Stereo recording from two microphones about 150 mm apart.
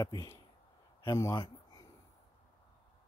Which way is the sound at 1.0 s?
25° left (ahead or behind).